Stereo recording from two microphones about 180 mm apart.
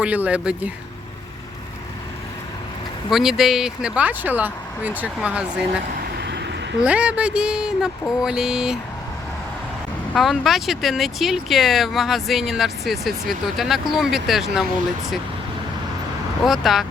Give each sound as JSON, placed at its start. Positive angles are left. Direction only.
{"t": 0.0, "sound": "speech", "side_deg": -5}
{"t": 3.1, "sound": "speech", "side_deg": 0}
{"t": 5.9, "sound": "vehicle", "side_deg": -60}
{"t": 6.8, "sound": "speech", "side_deg": -5}
{"t": 10.2, "sound": "speech", "side_deg": 0}
{"t": 16.4, "sound": "speech", "side_deg": 0}